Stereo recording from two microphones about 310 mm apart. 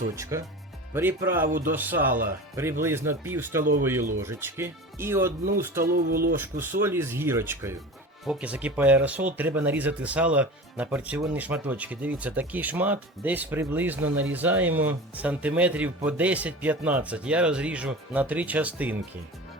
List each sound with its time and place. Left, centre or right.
0.2 s speech: centre
3.6 s music: right
4.2 s speech: centre
5.8 s music: right
6.4 s speech: centre